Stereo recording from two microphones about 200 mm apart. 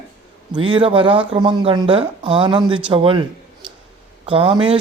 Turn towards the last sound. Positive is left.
turn(degrees=-25)  # may be behind; listen again after turning